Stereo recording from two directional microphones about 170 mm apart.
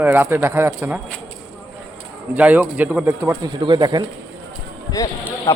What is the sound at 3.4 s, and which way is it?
Speech, 25° right (ahead or behind).